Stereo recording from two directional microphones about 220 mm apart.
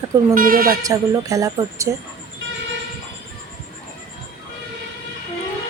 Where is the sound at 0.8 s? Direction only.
15° right (ahead or behind).